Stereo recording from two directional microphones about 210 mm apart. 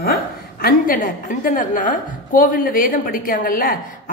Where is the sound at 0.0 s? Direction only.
45° left (ahead or behind).